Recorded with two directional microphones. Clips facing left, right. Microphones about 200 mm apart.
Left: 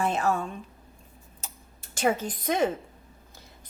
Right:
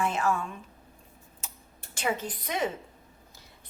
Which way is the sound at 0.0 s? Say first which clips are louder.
Left 2 dB; 35° left (ahead or behind).